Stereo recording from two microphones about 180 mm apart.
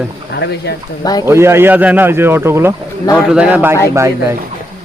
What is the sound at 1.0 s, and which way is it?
Speech, 20° left (ahead or behind).